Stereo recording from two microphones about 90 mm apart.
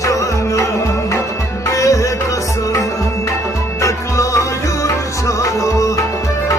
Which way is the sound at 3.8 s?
35° left (ahead or behind).